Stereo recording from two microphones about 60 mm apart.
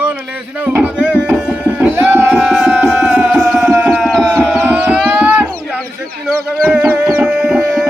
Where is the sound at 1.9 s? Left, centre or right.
Right.